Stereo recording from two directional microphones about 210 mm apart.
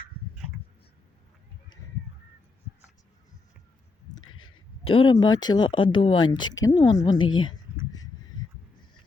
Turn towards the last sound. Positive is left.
turn(degrees=25)  # may be behind; listen again after turning